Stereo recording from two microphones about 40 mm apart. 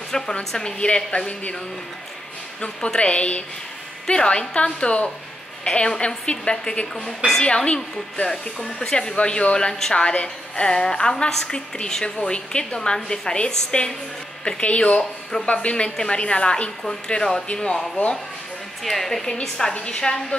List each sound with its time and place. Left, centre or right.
0.1 s a woman's voice: centre
0.7 s a woman's voice: left
3.0 s a woman's voice: left; by 9.1 s centre
9.1 s a woman's voice: left
9.9 s a woman's voice: left
14.6 s a woman's voice: left
18.0 s speech: left
18.9 s a woman's voice: centre
19.7 s a woman's voice: left